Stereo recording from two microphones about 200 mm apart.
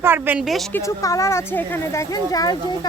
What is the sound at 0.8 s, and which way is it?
Speech, 15° left (ahead or behind).